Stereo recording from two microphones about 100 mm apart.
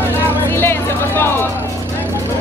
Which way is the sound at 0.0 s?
25° left (ahead or behind).